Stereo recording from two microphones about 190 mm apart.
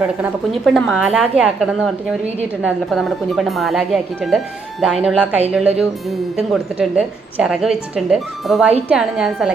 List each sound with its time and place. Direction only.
0.2 s a woman's voice: centre (ahead or behind)